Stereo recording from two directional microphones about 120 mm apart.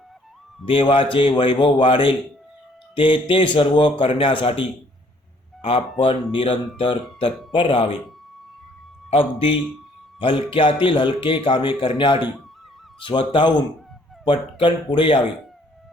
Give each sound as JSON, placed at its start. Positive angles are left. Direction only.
{"t": 0.6, "sound": "speech", "side_deg": 50}
{"t": 6.3, "sound": "speech", "side_deg": 45}
{"t": 9.0, "sound": "speech", "side_deg": 50}